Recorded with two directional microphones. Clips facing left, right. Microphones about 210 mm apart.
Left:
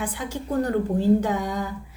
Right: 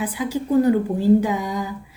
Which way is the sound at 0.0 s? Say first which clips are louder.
Right 6 dB; 5° right (ahead or behind).